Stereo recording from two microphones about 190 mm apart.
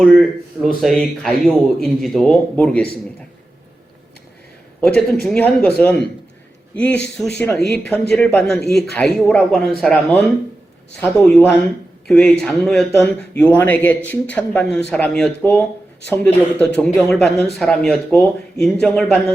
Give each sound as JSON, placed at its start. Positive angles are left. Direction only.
{"t": 0.8, "sound": "speech", "side_deg": 0}
{"t": 4.8, "sound": "speech", "side_deg": 0}